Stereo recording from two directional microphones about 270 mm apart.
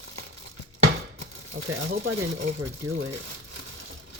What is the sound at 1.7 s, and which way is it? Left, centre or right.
Speech, right.